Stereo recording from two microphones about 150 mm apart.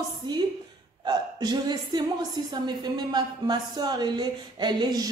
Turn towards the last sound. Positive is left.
turn(degrees=-30)  # may be behind; listen again after turning